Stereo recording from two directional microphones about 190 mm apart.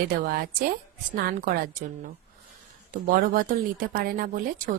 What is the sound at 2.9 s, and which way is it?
A woman's voice, 45° right (ahead or behind).